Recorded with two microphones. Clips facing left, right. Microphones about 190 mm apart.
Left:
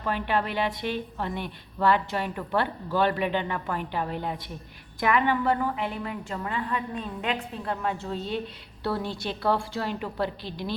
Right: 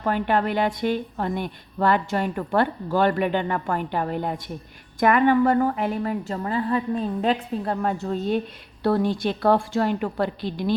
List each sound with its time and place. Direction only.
0.0 s a woman's voice: 50° right (ahead or behind)